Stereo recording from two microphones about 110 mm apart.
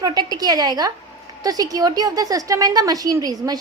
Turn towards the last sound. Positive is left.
turn(degrees=-35)  # may be behind; listen again after turning